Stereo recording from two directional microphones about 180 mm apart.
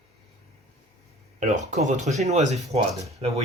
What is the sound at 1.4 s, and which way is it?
Speech, 45° right (ahead or behind).